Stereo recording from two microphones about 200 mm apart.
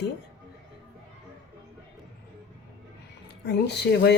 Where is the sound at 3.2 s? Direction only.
60° left (ahead or behind).